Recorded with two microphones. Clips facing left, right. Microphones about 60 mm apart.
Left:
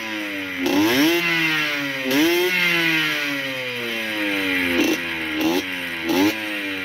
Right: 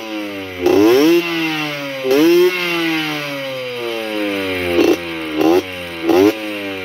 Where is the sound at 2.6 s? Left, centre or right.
Centre.